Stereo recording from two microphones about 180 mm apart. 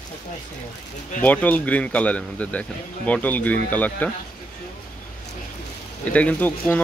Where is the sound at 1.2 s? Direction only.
10° left (ahead or behind).